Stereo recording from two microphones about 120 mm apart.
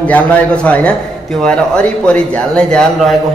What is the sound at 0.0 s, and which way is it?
A man's voice, 10° left (ahead or behind).